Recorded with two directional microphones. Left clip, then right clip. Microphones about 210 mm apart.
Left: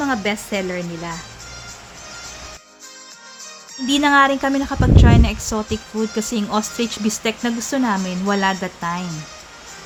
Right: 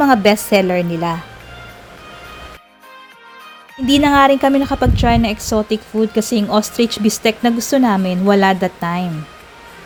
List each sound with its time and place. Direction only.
0.0 s a woman's voice: 30° right (ahead or behind)
3.8 s a woman's voice: 15° right (ahead or behind)